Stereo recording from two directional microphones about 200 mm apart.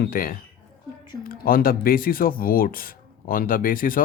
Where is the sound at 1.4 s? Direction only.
45° left (ahead or behind).